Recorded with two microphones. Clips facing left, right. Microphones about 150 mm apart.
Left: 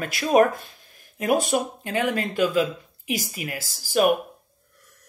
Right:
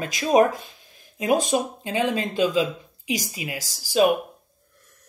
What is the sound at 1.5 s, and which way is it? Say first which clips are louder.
A woman's voice: right 1 dB; 20° right (ahead or behind).